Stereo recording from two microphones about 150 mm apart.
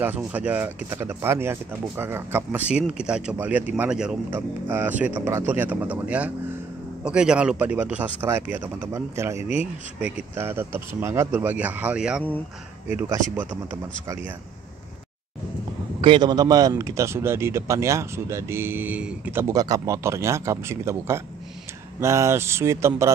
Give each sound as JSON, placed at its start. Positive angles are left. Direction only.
{"t": 0.0, "sound": "speech", "side_deg": -10}
{"t": 12.8, "sound": "speech", "side_deg": -20}
{"t": 16.0, "sound": "speech", "side_deg": -30}